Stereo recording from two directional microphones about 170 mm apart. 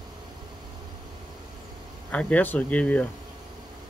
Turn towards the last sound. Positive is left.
turn(degrees=10)  # may be behind; listen again after turning